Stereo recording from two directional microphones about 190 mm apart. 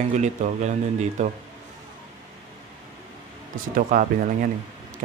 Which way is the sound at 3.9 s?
40° right (ahead or behind).